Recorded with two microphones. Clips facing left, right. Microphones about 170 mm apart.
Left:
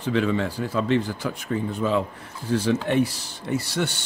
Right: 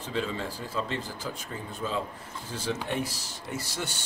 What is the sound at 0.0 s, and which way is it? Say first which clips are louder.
Speech: left 9 dB; 70° left (ahead or behind).